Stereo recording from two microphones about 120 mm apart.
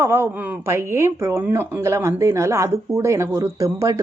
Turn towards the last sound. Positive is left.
turn(degrees=-25)  # may be behind; listen again after turning